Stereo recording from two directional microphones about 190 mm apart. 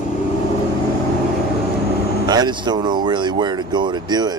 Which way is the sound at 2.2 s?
20° right (ahead or behind).